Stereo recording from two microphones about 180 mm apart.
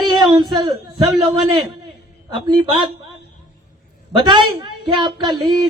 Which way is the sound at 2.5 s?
25° right (ahead or behind).